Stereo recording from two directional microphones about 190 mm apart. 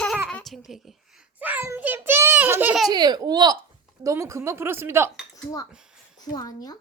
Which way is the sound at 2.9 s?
20° right (ahead or behind).